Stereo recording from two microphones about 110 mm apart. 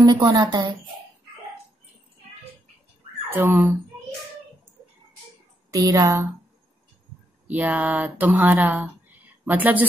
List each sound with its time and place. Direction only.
0.0 s a woman's voice: 35° right (ahead or behind)
3.3 s speech: 20° right (ahead or behind)
5.7 s a woman's voice: 30° right (ahead or behind)
7.4 s speech: 15° right (ahead or behind)